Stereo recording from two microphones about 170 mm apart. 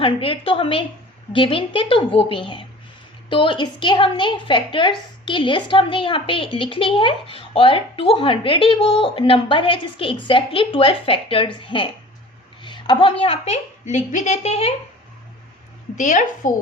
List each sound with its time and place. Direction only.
0.0 s a woman's voice: 30° left (ahead or behind)
16.0 s a woman's voice: 45° left (ahead or behind)